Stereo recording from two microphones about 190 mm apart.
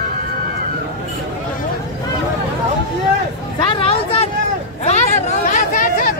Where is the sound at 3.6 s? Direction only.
30° left (ahead or behind); by 6.2 s 45° left (ahead or behind).